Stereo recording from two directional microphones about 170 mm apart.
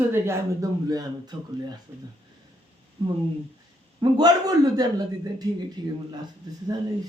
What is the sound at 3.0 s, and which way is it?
A man's voice, 30° right (ahead or behind).